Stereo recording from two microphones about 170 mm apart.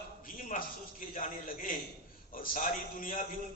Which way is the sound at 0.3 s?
50° left (ahead or behind).